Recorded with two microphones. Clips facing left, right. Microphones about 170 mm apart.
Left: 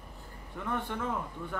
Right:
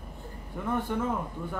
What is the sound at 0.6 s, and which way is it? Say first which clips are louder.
Speech: right 4 dB; 5° right (ahead or behind).